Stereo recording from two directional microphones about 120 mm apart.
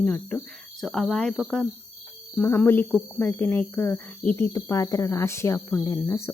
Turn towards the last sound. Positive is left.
turn(degrees=25)  # may be behind; listen again after turning